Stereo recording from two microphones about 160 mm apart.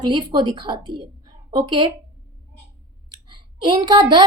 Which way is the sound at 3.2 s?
30° right (ahead or behind).